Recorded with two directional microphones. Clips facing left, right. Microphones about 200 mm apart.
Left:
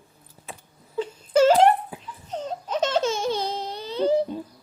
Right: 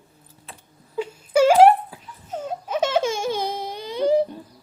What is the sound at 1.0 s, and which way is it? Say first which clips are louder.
Wail: right 1 dB; 10° right (ahead or behind).